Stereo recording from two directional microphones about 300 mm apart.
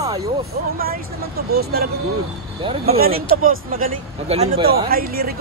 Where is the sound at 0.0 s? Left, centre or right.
Centre.